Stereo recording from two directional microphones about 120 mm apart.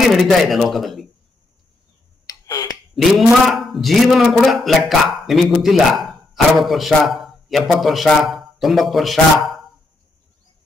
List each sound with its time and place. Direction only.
0.0 s speech: centre (ahead or behind)
2.2 s finger snapping: 30° left (ahead or behind)
3.0 s speech: centre (ahead or behind)